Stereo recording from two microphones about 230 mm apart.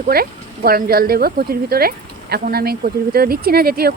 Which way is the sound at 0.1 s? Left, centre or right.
Right.